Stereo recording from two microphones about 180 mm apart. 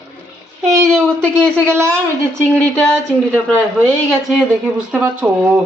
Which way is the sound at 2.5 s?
5° left (ahead or behind).